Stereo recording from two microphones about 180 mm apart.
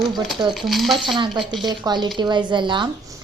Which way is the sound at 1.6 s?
25° right (ahead or behind).